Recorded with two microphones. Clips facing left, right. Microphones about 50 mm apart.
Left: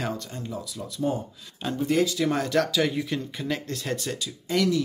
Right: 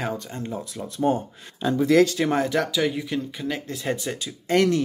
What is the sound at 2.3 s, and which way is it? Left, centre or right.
Speech, centre.